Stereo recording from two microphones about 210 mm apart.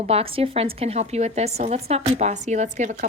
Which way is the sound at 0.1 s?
25° right (ahead or behind).